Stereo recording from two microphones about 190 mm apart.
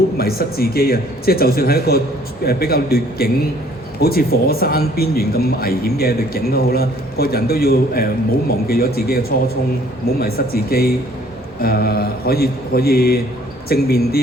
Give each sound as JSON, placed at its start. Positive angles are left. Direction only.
{"t": 0.2, "sound": "speech", "side_deg": 55}